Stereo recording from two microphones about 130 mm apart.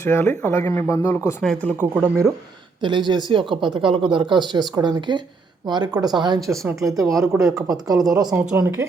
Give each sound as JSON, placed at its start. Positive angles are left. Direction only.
{"t": 0.0, "sound": "speech", "side_deg": 20}
{"t": 1.4, "sound": "speech", "side_deg": 5}
{"t": 1.8, "sound": "speech", "side_deg": -15}
{"t": 2.8, "sound": "a woman's voice", "side_deg": -35}